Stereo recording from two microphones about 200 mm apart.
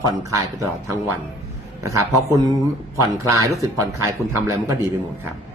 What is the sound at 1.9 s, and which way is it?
Speech, 15° right (ahead or behind).